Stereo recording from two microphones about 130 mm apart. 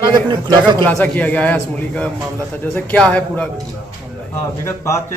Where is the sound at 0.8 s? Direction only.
10° left (ahead or behind).